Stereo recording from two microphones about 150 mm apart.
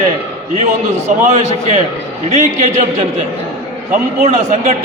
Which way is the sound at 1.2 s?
50° right (ahead or behind).